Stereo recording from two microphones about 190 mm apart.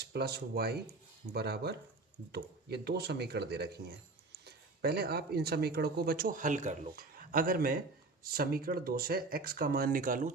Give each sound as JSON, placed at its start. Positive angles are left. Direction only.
{"t": 0.0, "sound": "speech", "side_deg": -55}